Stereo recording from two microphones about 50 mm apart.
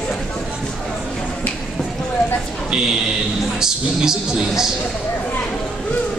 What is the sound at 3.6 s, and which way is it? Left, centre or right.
A man's voice, centre.